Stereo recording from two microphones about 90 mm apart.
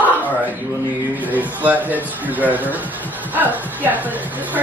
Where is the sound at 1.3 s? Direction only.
20° right (ahead or behind).